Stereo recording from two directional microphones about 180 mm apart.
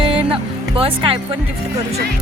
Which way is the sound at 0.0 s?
30° right (ahead or behind).